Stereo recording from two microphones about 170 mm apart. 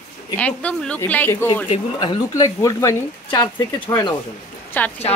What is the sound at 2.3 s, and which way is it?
Speech, 20° left (ahead or behind).